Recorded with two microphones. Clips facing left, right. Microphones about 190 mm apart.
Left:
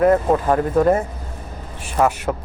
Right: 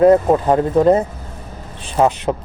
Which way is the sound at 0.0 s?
20° right (ahead or behind).